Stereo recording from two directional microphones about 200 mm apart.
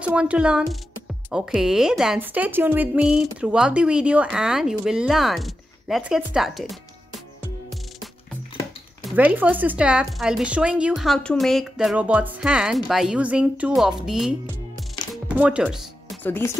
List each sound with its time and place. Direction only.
0.0 s speech: 5° right (ahead or behind)
9.1 s speech: 10° right (ahead or behind)
15.2 s music: 5° right (ahead or behind)
16.2 s speech: 10° left (ahead or behind)